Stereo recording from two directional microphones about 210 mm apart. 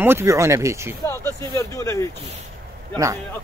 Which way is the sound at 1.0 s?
10° left (ahead or behind).